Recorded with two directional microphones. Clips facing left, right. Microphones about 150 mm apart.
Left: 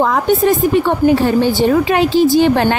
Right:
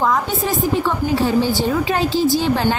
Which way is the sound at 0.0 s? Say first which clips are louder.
Left 6 dB; 60° left (ahead or behind).